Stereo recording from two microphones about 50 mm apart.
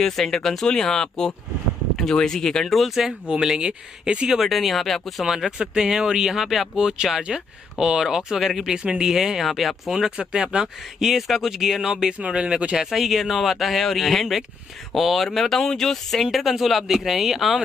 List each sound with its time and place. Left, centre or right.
0.0 s speech: centre
3.3 s speech: centre
4.3 s speech: centre
5.2 s speech: centre
6.8 s speech: centre
8.7 s speech: centre
9.9 s speech: centre
12.1 s speech: right
12.9 s speech: centre